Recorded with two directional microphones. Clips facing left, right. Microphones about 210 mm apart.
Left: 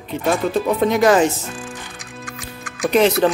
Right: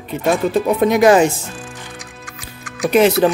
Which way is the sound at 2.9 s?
5° right (ahead or behind).